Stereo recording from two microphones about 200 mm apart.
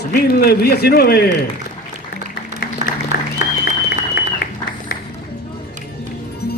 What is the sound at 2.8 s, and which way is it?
Applause, 35° right (ahead or behind).